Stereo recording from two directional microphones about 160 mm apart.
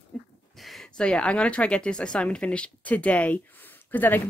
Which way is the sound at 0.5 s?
Centre (ahead or behind).